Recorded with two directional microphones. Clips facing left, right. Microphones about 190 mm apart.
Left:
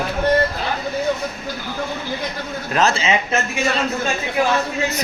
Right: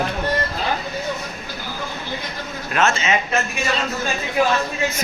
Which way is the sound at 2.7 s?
35° left (ahead or behind).